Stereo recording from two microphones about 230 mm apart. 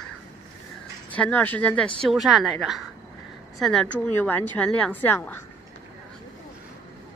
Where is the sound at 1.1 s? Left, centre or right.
Centre.